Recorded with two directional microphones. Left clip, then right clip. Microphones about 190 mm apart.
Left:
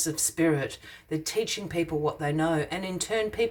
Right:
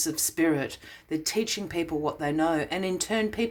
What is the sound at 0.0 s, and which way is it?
Speech, 30° right (ahead or behind).